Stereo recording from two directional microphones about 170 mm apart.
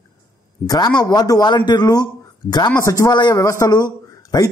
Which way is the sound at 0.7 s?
25° left (ahead or behind).